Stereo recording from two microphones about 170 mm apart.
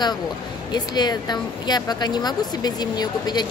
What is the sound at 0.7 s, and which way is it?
Speech, 25° left (ahead or behind).